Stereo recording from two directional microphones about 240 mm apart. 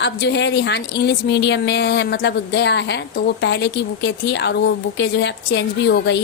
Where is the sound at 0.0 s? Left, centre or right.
Left.